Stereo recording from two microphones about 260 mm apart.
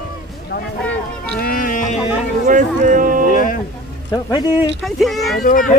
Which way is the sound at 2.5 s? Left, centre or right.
Right.